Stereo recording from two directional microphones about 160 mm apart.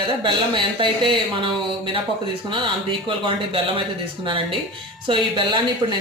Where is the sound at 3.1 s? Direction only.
35° right (ahead or behind).